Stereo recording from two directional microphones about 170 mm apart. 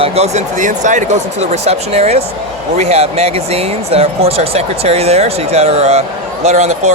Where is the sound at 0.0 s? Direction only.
40° right (ahead or behind).